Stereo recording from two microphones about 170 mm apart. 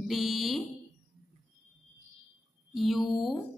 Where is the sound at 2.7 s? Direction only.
Centre (ahead or behind).